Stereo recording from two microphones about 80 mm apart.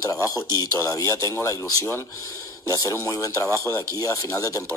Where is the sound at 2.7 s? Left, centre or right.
Left.